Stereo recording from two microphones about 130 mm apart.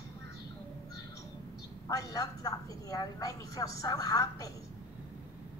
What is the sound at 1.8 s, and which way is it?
A woman's voice, 25° left (ahead or behind).